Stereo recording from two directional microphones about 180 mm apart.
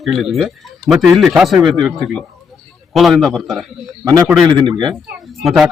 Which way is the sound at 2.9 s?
Centre (ahead or behind).